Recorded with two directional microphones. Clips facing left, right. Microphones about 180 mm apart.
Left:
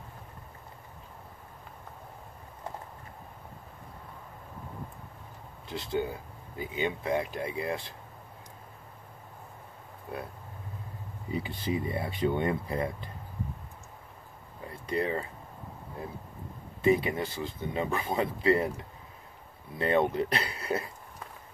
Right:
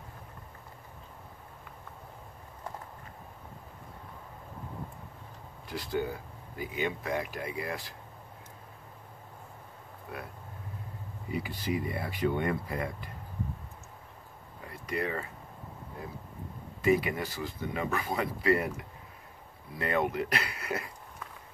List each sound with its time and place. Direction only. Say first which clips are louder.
5.7 s speech: left 1 dB; 25° left (ahead or behind)
11.3 s speech: left 1 dB; 25° left (ahead or behind)
14.7 s a sound: left 3 dB; 25° left (ahead or behind)
16.8 s speech: left 1 dB; 25° left (ahead or behind)
19.7 s speech: left 4 dB; 25° left (ahead or behind)